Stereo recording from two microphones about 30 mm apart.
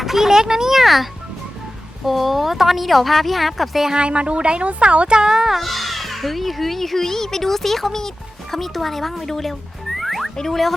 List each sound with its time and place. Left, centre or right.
0.0 s a child's voice: centre
2.0 s speech: centre
3.9 s speech: right
5.1 s speech: right
5.5 s speech: centre
10.0 s music: centre
10.5 s speech: centre